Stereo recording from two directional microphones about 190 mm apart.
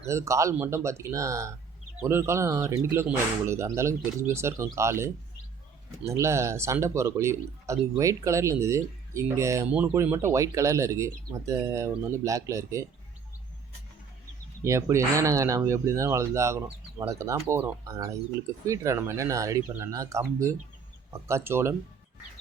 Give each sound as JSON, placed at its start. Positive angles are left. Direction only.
{"t": 0.1, "sound": "speech", "side_deg": -15}
{"t": 14.6, "sound": "speech", "side_deg": -15}